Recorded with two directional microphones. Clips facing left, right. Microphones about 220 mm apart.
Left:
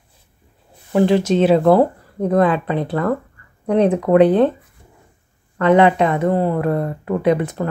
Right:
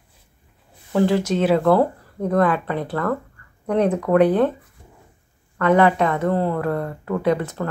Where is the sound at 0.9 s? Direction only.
20° left (ahead or behind).